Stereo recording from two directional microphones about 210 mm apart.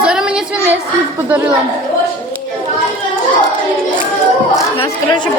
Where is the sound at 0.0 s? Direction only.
5° right (ahead or behind).